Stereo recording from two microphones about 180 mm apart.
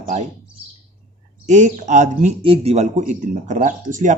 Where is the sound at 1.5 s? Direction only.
40° right (ahead or behind).